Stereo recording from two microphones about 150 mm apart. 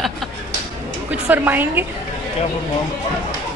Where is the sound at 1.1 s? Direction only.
10° right (ahead or behind).